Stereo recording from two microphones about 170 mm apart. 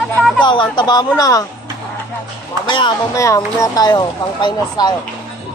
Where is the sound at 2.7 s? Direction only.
25° left (ahead or behind).